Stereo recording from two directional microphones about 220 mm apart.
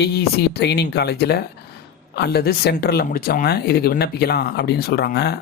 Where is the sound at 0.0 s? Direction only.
45° left (ahead or behind).